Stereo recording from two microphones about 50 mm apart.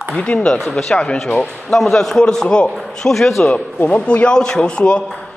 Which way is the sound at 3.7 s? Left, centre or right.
Left.